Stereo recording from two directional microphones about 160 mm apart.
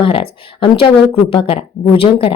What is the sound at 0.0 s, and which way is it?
A woman's voice, 35° left (ahead or behind).